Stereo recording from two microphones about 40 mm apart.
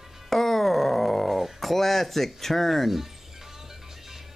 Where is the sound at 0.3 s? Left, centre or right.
Centre.